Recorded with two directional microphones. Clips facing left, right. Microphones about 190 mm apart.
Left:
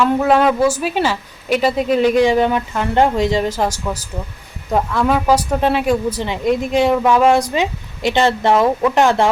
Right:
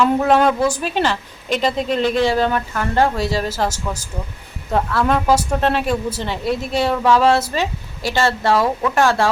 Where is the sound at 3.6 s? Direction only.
10° left (ahead or behind).